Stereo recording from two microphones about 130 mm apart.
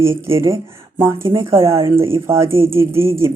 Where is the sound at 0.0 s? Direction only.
20° right (ahead or behind).